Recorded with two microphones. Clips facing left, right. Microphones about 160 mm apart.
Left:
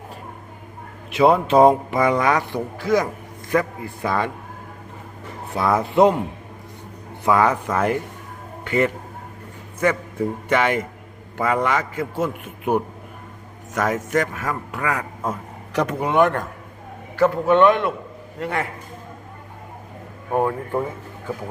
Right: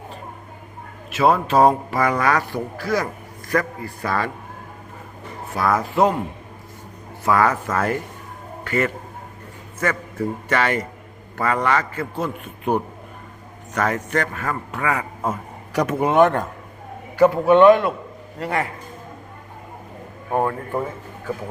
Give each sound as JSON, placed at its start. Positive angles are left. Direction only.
{"t": 1.1, "sound": "a man's voice", "side_deg": 20}
{"t": 5.5, "sound": "speech", "side_deg": 20}
{"t": 7.3, "sound": "a man's voice", "side_deg": 15}
{"t": 16.0, "sound": "a man's voice", "side_deg": -25}
{"t": 17.7, "sound": "a man's voice", "side_deg": 0}
{"t": 20.3, "sound": "a man's voice", "side_deg": 5}